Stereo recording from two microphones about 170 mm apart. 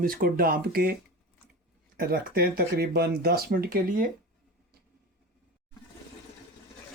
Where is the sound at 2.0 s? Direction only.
60° right (ahead or behind).